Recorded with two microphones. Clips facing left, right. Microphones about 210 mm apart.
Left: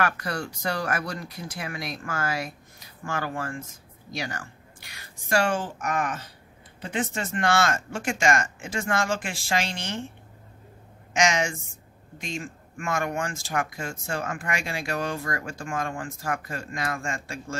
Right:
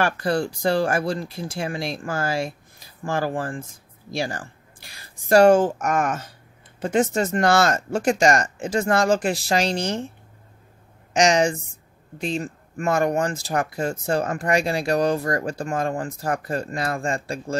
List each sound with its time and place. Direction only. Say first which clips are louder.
0.0 s speech: right 6 dB; 30° right (ahead or behind)
11.1 s speech: right 6 dB; 35° right (ahead or behind)